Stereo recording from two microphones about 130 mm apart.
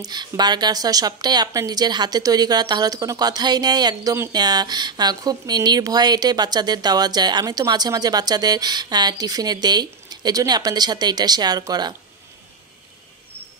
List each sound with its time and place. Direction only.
0.0 s speech: 35° right (ahead or behind)